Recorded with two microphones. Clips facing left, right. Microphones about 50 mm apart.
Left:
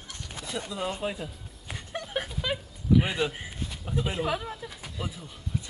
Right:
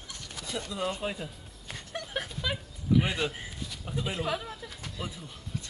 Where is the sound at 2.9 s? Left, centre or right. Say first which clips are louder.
Left 2 dB; centre.